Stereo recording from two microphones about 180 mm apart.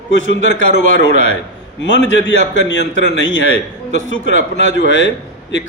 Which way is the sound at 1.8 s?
90° left.